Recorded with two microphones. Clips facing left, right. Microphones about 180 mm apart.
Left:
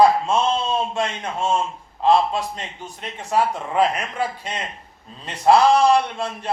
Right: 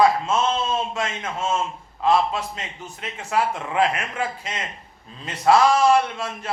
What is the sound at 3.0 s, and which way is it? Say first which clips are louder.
Speech: left 2 dB; 35° left (ahead or behind).